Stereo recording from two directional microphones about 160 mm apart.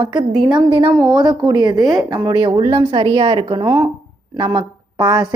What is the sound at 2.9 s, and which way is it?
A woman's voice, 30° right (ahead or behind).